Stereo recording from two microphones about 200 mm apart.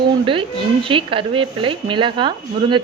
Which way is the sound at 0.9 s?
25° right (ahead or behind).